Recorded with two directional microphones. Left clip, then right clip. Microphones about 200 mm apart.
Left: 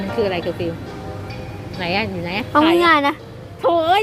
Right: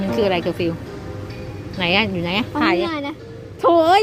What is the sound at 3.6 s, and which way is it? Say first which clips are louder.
Music: right 2 dB; 40° right (ahead or behind).